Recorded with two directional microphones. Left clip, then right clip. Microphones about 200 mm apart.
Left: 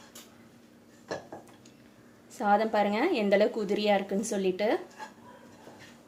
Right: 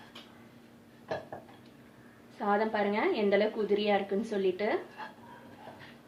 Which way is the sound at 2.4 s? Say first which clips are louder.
Left 4 dB; 60° left (ahead or behind).